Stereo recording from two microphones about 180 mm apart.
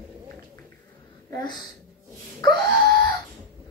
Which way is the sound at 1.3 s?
20° left (ahead or behind).